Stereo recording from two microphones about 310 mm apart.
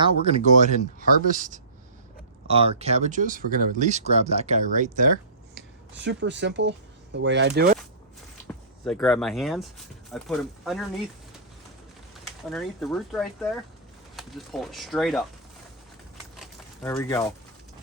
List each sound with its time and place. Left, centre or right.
0.0 s speech: right
5.5 s speech: right
8.8 s speech: centre
12.5 s speech: centre
16.4 s a sound: centre